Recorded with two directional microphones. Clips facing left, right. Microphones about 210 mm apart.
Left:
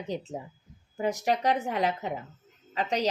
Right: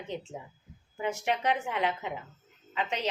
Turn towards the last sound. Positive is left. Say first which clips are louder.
# left 4 dB
turn(degrees=40)  # may be behind; listen again after turning